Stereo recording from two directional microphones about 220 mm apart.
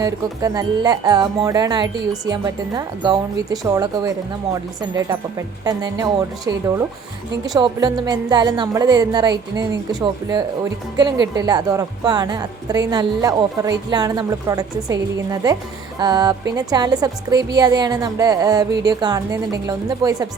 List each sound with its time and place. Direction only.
0.0 s a woman's voice: 15° right (ahead or behind)
16.0 s a woman's voice: 20° right (ahead or behind)